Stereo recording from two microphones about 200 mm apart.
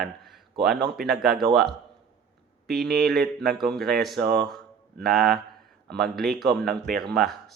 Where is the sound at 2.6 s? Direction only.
Centre (ahead or behind).